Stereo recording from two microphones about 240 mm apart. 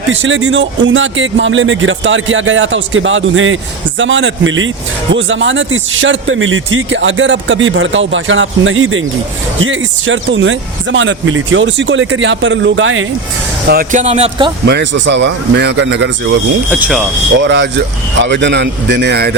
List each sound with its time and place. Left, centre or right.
0.1 s speech: right
13.7 s speech: right
14.7 s speech: right
16.6 s speech: centre
17.3 s speech: right